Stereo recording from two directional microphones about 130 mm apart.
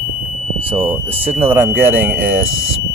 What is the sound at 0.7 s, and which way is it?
Speech, 15° right (ahead or behind).